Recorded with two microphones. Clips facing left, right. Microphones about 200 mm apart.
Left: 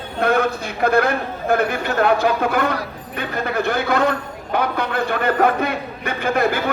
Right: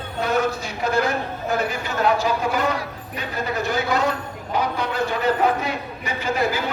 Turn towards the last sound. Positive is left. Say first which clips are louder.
# left 4 dB
turn(degrees=55)  # may be behind; listen again after turning